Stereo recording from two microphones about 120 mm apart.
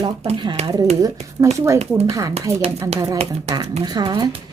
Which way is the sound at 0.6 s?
65° right (ahead or behind).